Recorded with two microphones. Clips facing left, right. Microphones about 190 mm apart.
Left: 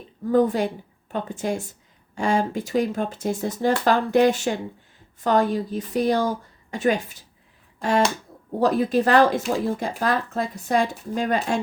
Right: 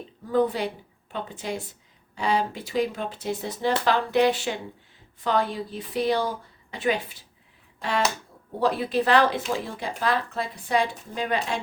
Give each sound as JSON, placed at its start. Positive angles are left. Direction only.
{"t": 0.3, "sound": "speech", "side_deg": 45}
{"t": 7.8, "sound": "a sound", "side_deg": 45}
{"t": 8.5, "sound": "speech", "side_deg": 45}